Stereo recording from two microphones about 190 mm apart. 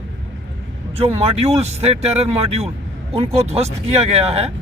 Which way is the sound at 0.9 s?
30° right (ahead or behind).